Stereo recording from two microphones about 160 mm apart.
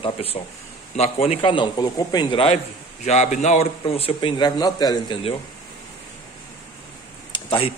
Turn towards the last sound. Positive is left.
turn(degrees=35)  # may be behind; listen again after turning